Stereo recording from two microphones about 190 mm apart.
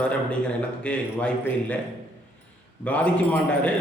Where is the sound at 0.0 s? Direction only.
5° left (ahead or behind).